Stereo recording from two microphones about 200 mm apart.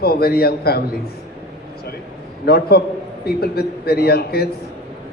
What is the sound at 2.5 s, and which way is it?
A woman's voice, 50° left (ahead or behind).